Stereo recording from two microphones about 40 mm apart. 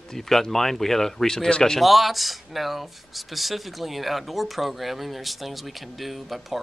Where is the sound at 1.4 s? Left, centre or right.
Left.